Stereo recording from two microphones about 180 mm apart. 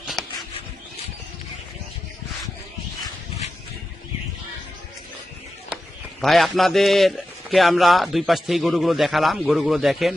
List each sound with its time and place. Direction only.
6.2 s speech: centre (ahead or behind)